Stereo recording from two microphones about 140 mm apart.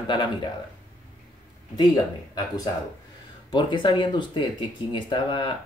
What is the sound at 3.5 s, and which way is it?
Speech, 35° left (ahead or behind).